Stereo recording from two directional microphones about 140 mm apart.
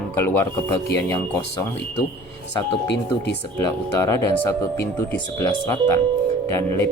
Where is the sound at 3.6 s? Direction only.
25° left (ahead or behind).